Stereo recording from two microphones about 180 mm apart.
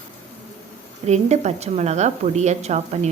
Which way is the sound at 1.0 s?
40° right (ahead or behind).